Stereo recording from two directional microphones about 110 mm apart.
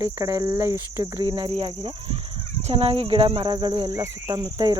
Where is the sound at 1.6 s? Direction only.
60° right (ahead or behind).